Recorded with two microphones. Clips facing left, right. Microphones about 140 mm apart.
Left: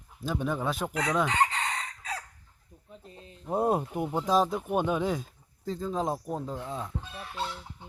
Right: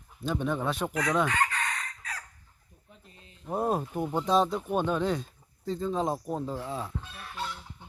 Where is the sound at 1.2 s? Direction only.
25° left (ahead or behind).